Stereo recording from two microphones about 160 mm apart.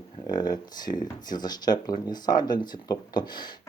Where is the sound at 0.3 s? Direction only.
25° left (ahead or behind).